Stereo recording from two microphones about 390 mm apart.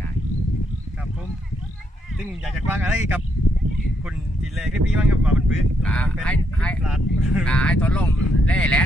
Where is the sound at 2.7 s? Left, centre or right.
Centre.